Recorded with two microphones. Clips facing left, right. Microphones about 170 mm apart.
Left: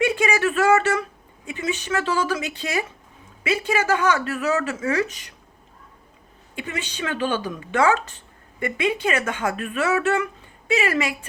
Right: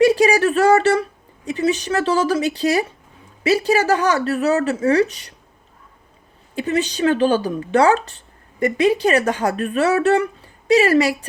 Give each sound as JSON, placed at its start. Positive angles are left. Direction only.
{"t": 0.0, "sound": "speech", "side_deg": -35}
{"t": 6.6, "sound": "speech", "side_deg": -35}